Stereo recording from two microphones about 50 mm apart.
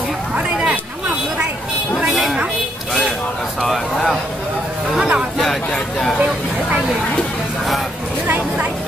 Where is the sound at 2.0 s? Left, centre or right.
Centre.